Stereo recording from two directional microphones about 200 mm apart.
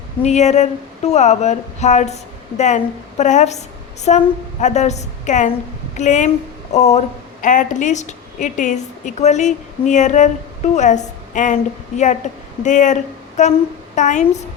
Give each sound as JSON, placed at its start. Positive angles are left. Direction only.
{"t": 0.2, "sound": "a woman's voice", "side_deg": 35}